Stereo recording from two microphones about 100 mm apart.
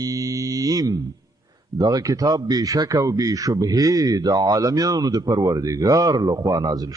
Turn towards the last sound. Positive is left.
turn(degrees=-40)  # may be behind; listen again after turning